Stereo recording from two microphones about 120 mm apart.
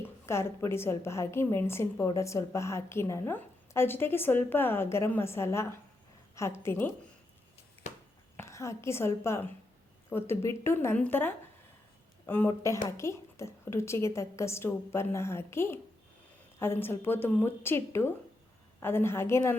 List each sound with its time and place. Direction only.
0.0 s a woman's voice: 20° left (ahead or behind)
8.4 s a woman's voice: 25° left (ahead or behind)